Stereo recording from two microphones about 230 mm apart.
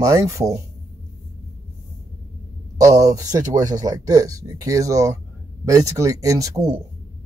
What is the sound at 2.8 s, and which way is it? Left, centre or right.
Speech, centre.